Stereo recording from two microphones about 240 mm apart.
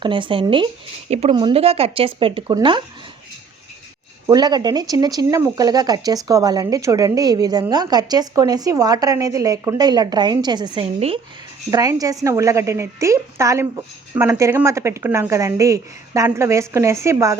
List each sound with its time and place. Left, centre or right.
0.0 s speech: right
4.3 s speech: centre